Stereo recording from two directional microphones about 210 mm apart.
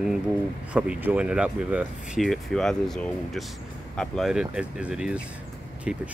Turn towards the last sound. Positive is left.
turn(degrees=-5)  # may be behind; listen again after turning